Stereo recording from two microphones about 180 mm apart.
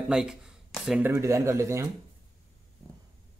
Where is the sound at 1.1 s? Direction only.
15° right (ahead or behind).